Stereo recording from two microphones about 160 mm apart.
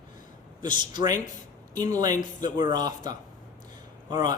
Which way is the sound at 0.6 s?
30° right (ahead or behind).